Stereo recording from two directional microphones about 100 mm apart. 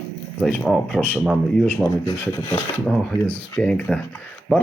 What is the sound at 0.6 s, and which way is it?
Speech, 5° right (ahead or behind).